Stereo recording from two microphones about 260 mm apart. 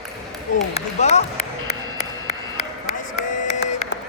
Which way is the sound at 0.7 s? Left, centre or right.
Left.